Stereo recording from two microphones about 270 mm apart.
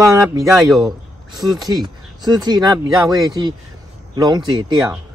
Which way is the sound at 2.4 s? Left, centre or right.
Centre.